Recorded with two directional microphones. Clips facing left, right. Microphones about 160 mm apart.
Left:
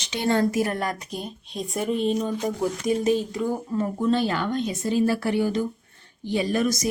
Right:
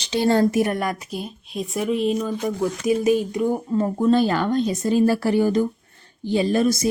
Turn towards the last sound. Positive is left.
turn(degrees=-30)  # may be behind; listen again after turning